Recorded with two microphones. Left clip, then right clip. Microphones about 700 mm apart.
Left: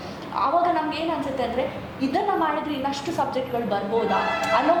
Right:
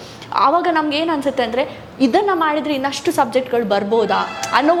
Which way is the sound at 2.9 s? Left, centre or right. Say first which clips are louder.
Right 8 dB; right.